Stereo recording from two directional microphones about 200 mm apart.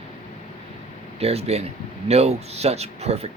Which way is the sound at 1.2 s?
30° right (ahead or behind).